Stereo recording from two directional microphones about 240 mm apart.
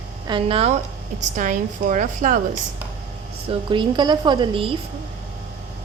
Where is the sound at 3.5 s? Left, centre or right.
Centre.